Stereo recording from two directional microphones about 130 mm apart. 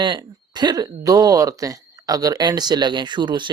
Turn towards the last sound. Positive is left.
turn(degrees=-35)  # may be behind; listen again after turning